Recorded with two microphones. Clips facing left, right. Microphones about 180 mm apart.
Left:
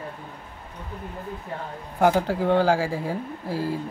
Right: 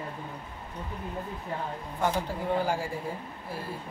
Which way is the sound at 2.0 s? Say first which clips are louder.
Left 9 dB; 90° left.